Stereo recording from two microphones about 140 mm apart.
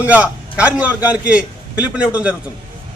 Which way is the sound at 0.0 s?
10° right (ahead or behind).